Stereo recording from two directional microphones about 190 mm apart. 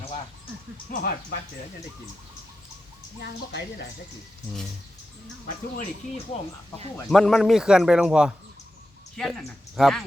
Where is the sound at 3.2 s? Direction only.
60° left (ahead or behind).